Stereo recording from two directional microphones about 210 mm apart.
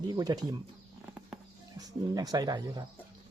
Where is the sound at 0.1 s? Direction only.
15° right (ahead or behind).